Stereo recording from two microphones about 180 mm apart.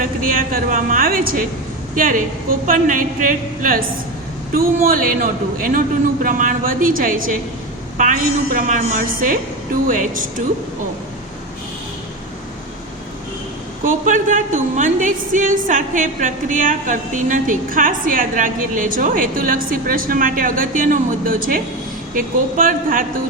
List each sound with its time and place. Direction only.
0.0 s a woman's voice: 50° right (ahead or behind)
13.8 s a woman's voice: 45° right (ahead or behind)